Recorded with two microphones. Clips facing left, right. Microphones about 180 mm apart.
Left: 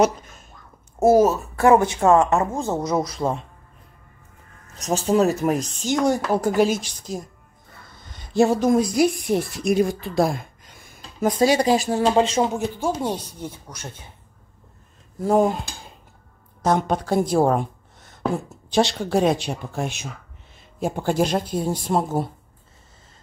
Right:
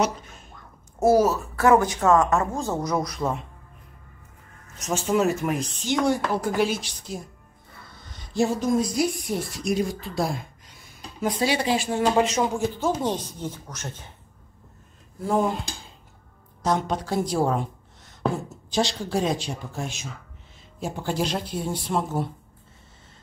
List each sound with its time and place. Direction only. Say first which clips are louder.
1.1 s a woman's voice: left 3 dB; 25° left (ahead or behind)
4.7 s speech: left 4 dB; 35° left (ahead or behind)
8.4 s a woman's voice: left 5 dB; 65° left (ahead or behind); by 12.6 s 30° left (ahead or behind)
12.7 s a woman's voice: even; 10° left (ahead or behind)
16.6 s a woman's voice: left 4 dB; 55° left (ahead or behind)
18.7 s a woman's voice: left 5 dB; 60° left (ahead or behind); by 22.3 s 40° left (ahead or behind)